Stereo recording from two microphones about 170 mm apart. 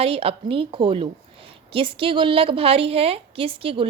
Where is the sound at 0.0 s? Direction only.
35° right (ahead or behind).